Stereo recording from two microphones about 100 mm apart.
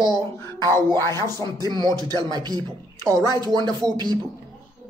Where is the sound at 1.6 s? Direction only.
45° right (ahead or behind).